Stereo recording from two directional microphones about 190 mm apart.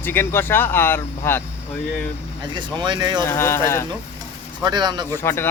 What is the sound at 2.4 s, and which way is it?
Speech, 25° right (ahead or behind).